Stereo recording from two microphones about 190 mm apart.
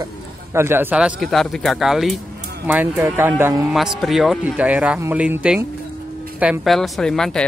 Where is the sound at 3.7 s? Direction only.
Centre (ahead or behind).